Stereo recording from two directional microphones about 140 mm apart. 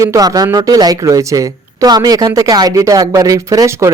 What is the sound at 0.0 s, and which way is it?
Speech, 25° right (ahead or behind).